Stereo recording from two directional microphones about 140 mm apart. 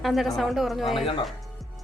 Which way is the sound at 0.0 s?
Centre (ahead or behind).